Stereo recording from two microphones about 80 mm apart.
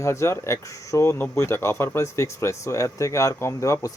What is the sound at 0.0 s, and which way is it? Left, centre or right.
Speech, left.